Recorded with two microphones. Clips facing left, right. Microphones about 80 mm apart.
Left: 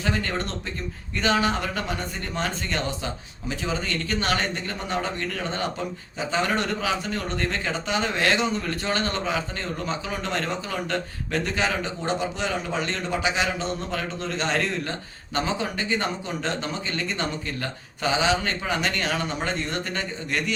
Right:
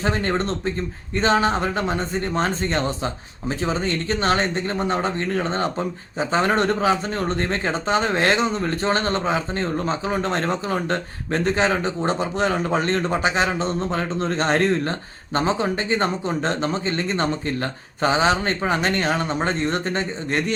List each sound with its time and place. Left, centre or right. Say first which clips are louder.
0.0 s a man's voice: right 5 dB; right